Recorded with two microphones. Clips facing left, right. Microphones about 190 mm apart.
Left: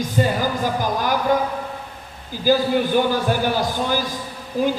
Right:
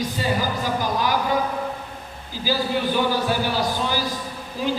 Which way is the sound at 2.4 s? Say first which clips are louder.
Left 5 dB; 50° left (ahead or behind).